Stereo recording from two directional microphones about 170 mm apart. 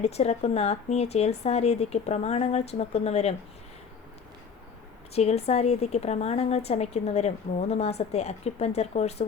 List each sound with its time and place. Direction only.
0.0 s a woman's voice: 40° left (ahead or behind)
5.1 s a woman's voice: 40° left (ahead or behind)